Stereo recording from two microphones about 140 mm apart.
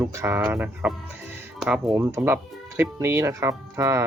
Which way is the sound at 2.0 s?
15° right (ahead or behind).